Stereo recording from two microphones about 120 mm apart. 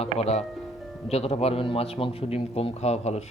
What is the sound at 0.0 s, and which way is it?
A man's voice, 60° left (ahead or behind).